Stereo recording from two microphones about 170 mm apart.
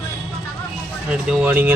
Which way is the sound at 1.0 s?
5° right (ahead or behind).